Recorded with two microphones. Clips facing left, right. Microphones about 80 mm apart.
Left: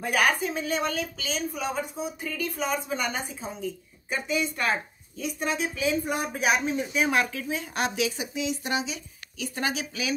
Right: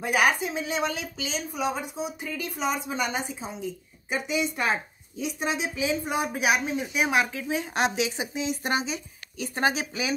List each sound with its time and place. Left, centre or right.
0.0 s a woman's voice: centre; by 10.1 s right